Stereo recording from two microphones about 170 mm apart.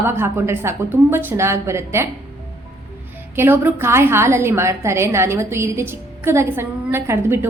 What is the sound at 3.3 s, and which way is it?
A woman's voice, 15° right (ahead or behind).